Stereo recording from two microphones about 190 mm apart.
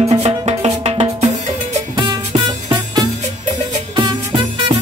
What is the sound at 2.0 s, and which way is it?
Music, 20° right (ahead or behind).